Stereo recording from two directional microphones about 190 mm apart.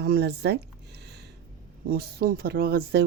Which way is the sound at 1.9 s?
50° right (ahead or behind).